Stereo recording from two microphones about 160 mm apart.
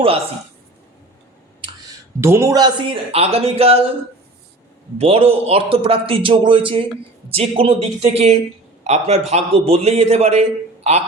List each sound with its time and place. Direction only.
2.2 s a man's voice: 15° right (ahead or behind); by 3.8 s 40° right (ahead or behind)
4.9 s a man's voice: 40° right (ahead or behind)